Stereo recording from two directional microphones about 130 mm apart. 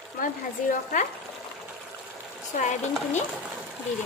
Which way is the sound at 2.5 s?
65° left (ahead or behind).